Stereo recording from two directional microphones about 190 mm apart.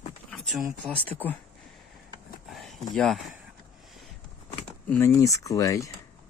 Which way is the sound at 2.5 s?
Centre (ahead or behind).